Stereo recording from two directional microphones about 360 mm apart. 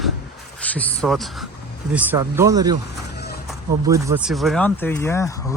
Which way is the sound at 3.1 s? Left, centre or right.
Left.